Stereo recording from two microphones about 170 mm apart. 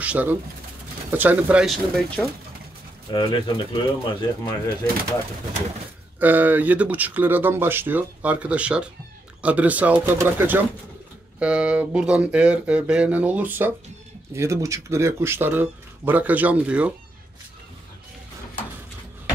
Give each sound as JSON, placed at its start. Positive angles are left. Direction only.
{"t": 0.0, "sound": "speech", "side_deg": -10}
{"t": 3.1, "sound": "speech", "side_deg": 30}
{"t": 6.1, "sound": "speech", "side_deg": -10}